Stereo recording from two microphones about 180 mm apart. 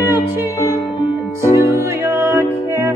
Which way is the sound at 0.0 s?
10° right (ahead or behind).